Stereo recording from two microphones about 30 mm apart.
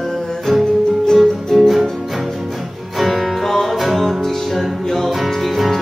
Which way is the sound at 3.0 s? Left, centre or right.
Centre.